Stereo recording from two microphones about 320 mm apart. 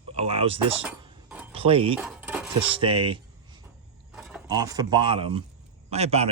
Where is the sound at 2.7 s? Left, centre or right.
Centre.